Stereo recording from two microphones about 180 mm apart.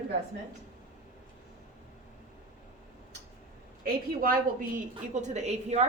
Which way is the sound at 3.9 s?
50° right (ahead or behind).